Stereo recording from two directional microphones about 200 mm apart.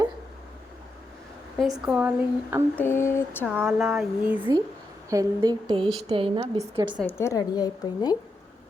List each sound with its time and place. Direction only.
1.8 s speech: 5° right (ahead or behind)
2.7 s a woman's voice: 10° left (ahead or behind)
3.4 s speech: 10° right (ahead or behind)
5.0 s a woman's voice: 20° right (ahead or behind)
7.0 s a woman's voice: 10° left (ahead or behind)